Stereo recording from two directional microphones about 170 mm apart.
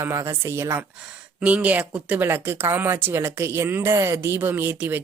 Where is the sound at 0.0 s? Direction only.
15° right (ahead or behind).